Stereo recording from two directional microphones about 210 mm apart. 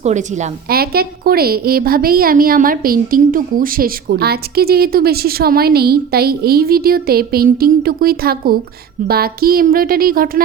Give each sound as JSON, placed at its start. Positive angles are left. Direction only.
{"t": 0.0, "sound": "a woman's voice", "side_deg": -35}